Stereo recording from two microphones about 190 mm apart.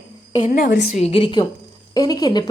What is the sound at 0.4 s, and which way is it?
Speech, 50° left (ahead or behind).